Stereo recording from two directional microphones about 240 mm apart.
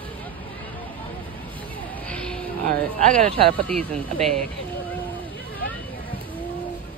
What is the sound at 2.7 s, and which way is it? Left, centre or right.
Speech, right.